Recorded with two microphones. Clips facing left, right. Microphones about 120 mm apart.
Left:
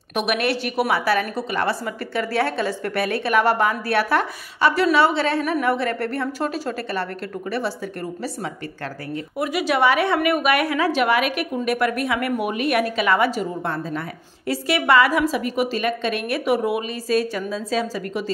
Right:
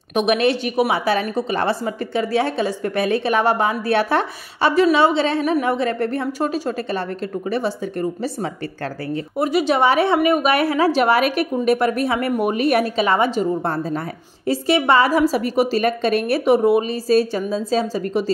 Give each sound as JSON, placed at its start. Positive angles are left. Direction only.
{"t": 0.1, "sound": "a woman's voice", "side_deg": -20}
{"t": 9.1, "sound": "a woman's voice", "side_deg": -30}